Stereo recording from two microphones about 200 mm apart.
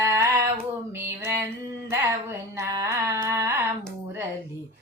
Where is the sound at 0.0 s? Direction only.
15° right (ahead or behind).